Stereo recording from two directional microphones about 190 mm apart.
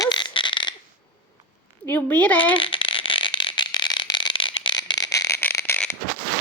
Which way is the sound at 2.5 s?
25° left (ahead or behind).